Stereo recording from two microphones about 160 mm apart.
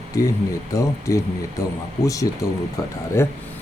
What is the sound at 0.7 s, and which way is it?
Speech, 20° left (ahead or behind).